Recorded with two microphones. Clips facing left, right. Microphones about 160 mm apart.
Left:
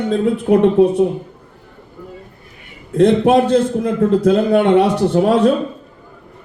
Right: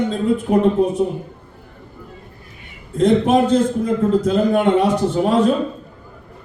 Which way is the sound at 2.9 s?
65° left (ahead or behind).